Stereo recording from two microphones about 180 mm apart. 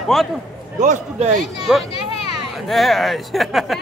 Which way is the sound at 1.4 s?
Centre (ahead or behind).